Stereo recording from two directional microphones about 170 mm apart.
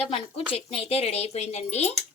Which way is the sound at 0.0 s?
35° left (ahead or behind).